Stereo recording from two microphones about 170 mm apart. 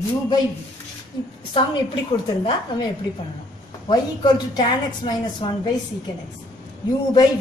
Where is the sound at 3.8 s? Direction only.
25° left (ahead or behind).